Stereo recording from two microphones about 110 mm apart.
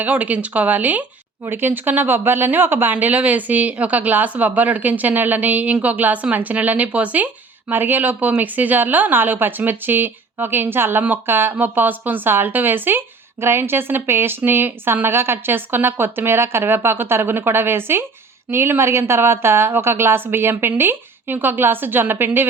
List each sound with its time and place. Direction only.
0.0 s a woman's voice: 15° right (ahead or behind)